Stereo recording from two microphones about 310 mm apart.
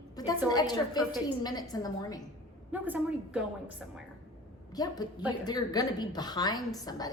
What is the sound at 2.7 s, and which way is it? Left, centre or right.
Speech, centre.